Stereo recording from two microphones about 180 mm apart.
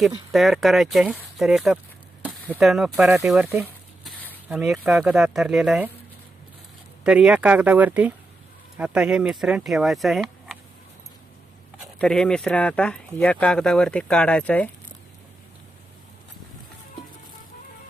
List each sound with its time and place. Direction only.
0.0 s speech: centre (ahead or behind)
4.0 s a sound: 10° left (ahead or behind)
4.4 s speech: 5° right (ahead or behind)
7.0 s speech: 5° right (ahead or behind)
11.9 s speech: 5° left (ahead or behind)